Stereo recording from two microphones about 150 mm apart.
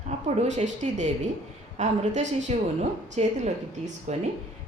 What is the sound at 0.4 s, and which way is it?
A woman's voice, 55° right (ahead or behind).